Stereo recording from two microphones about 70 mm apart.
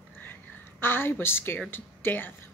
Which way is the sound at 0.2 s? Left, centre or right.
Left.